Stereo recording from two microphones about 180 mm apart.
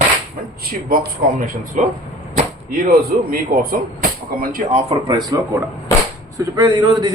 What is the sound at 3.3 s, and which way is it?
Speech, 55° right (ahead or behind).